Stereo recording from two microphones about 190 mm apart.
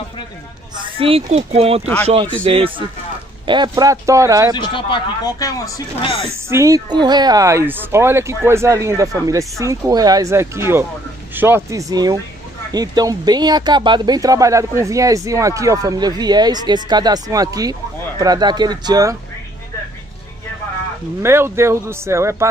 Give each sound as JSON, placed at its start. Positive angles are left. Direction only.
{"t": 0.7, "sound": "speech", "side_deg": -30}
{"t": 4.6, "sound": "speech", "side_deg": 25}
{"t": 6.3, "sound": "speech", "side_deg": -15}
{"t": 21.2, "sound": "speech", "side_deg": -15}